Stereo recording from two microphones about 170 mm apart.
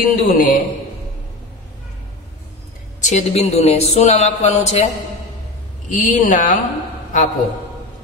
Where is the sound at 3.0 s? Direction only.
45° left (ahead or behind).